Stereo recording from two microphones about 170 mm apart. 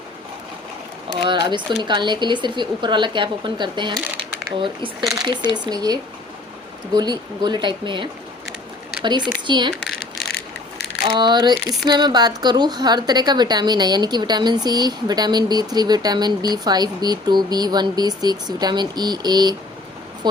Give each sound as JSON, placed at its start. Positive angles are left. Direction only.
{"t": 1.2, "sound": "a woman's voice", "side_deg": -25}
{"t": 11.0, "sound": "a woman's voice", "side_deg": -25}